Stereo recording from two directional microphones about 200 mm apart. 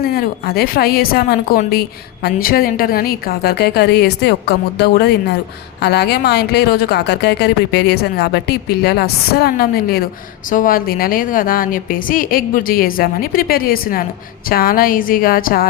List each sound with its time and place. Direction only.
0.0 s a woman's voice: 50° left (ahead or behind)